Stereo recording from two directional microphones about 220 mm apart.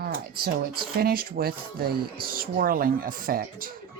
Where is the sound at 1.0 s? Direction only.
40° right (ahead or behind).